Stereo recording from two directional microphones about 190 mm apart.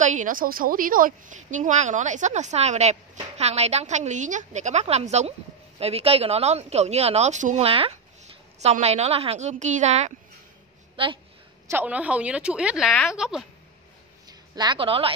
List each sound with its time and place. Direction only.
0.0 s a woman's voice: 40° right (ahead or behind)
11.6 s a woman's voice: 10° right (ahead or behind)
14.2 s a woman's voice: 20° right (ahead or behind)